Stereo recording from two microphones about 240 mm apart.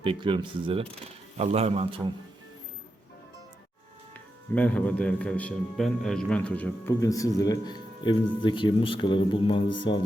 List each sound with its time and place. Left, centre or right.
0.0 s speech: right
4.1 s speech: centre